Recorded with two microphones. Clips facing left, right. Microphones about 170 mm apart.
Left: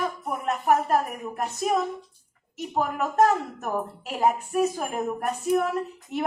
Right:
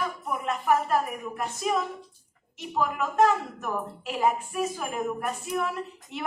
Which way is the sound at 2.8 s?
40° left (ahead or behind).